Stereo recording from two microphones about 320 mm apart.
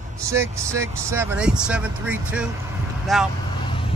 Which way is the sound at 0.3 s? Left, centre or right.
Centre.